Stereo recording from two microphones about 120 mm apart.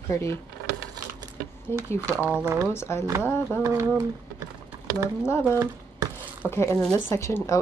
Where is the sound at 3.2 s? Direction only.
20° left (ahead or behind).